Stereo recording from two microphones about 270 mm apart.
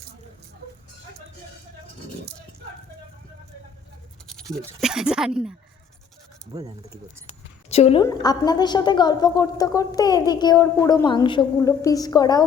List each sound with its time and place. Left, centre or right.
4.3 s speech: centre
6.5 s speech: centre
7.7 s a woman's voice: left